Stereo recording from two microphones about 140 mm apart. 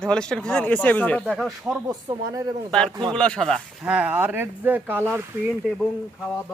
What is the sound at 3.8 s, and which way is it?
Speech, 10° right (ahead or behind).